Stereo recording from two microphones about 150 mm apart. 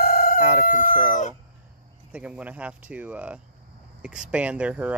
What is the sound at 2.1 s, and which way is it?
Speech, 10° right (ahead or behind).